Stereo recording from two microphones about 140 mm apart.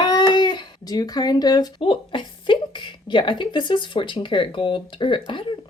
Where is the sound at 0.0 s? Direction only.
30° left (ahead or behind).